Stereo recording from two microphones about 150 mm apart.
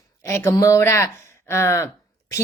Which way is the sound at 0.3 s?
15° left (ahead or behind).